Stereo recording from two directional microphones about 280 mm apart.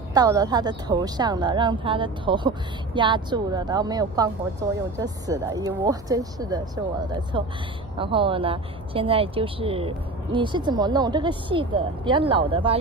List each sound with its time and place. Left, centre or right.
0.1 s speech: centre